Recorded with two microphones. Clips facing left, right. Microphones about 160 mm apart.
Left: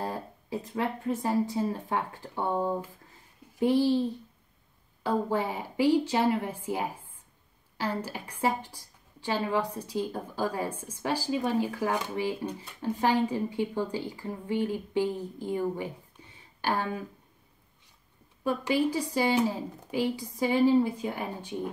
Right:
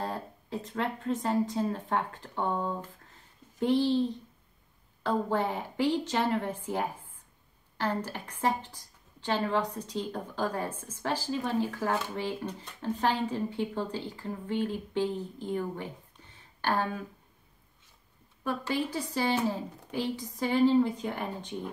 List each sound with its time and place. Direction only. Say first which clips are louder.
0.0 s a woman's voice: left 1 dB; 10° left (ahead or behind)
18.4 s a woman's voice: left 5 dB; 15° left (ahead or behind)